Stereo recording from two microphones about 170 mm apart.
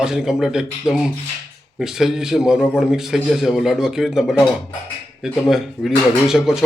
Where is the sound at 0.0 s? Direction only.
5° right (ahead or behind).